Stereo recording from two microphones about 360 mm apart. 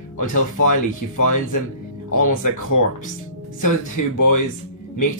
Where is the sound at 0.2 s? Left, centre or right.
Left.